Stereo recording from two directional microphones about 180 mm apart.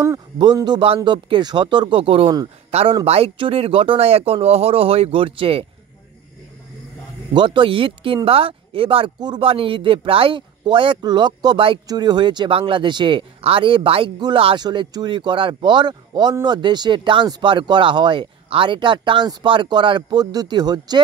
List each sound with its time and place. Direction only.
0.0 s speech: 20° right (ahead or behind)
7.3 s speech: 25° right (ahead or behind)